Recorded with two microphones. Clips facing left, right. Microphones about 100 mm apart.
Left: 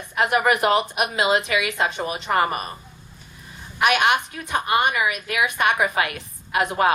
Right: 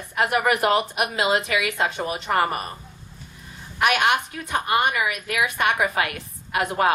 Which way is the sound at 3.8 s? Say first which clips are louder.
Left 1 dB; 20° left (ahead or behind).